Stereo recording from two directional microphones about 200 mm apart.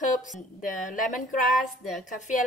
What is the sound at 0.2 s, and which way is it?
A woman's voice, 40° left (ahead or behind).